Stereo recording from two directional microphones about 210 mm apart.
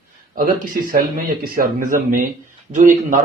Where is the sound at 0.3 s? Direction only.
40° right (ahead or behind).